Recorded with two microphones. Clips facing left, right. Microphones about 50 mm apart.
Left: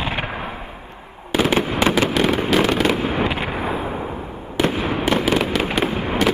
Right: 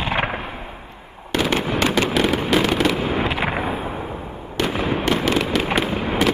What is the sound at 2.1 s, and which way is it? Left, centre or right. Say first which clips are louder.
Fireworks: left 1 dB; centre.